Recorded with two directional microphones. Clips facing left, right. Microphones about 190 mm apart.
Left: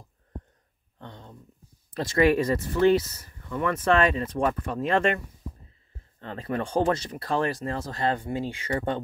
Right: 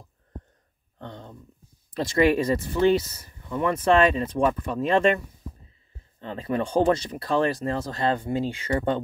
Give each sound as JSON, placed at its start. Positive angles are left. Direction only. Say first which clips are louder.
{"t": 0.9, "sound": "a sound", "louder": "right 5 dB", "side_deg": -30}
{"t": 2.0, "sound": "speech", "louder": "right 1 dB", "side_deg": -20}
{"t": 6.2, "sound": "speech", "louder": "right 3 dB", "side_deg": -25}